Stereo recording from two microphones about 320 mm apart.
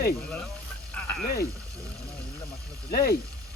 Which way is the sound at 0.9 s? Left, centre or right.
Left.